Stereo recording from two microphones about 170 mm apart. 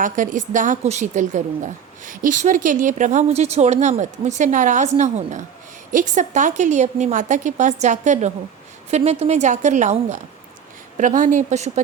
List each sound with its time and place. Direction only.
0.0 s a woman's voice: 50° right (ahead or behind)